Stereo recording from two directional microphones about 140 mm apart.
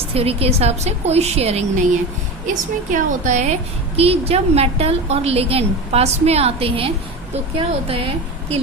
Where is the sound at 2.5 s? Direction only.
65° right (ahead or behind).